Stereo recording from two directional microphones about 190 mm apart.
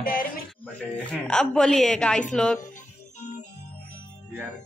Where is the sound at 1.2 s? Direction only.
5° left (ahead or behind).